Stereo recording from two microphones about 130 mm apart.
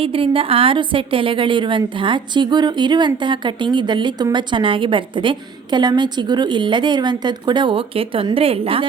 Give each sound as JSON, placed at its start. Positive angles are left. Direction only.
{"t": 0.0, "sound": "a woman's voice", "side_deg": -45}